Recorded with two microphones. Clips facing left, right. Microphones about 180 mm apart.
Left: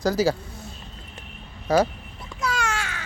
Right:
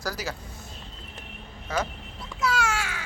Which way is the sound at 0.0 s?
25° left (ahead or behind).